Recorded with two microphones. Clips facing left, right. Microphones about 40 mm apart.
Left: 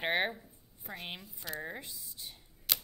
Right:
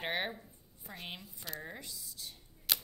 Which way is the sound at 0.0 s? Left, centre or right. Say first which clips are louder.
Left 5 dB; centre.